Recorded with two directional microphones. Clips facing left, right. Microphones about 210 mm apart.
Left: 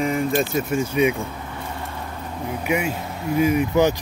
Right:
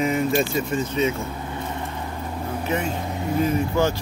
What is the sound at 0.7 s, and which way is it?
Speech, 10° left (ahead or behind).